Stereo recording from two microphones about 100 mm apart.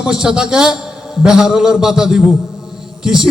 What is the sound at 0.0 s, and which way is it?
A man's voice, 5° right (ahead or behind).